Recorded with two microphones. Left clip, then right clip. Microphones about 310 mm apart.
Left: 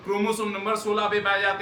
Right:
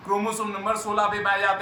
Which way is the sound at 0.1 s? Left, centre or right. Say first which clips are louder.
Even; centre.